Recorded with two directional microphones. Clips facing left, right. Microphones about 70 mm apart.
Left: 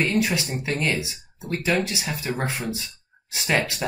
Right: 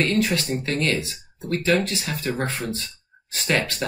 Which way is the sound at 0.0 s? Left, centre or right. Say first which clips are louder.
Right 1 dB; centre.